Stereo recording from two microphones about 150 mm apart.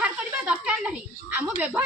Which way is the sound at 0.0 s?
5° right (ahead or behind).